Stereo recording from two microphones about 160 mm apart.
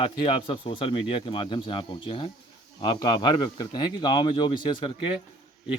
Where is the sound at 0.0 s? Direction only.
35° left (ahead or behind).